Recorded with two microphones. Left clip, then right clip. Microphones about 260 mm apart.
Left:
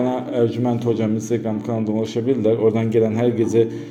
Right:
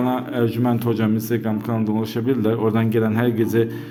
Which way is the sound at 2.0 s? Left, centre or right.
Right.